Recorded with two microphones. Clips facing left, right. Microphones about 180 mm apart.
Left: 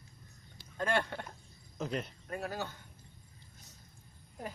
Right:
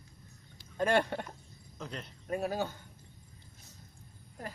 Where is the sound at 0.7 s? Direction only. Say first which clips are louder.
Right 4 dB; 15° right (ahead or behind).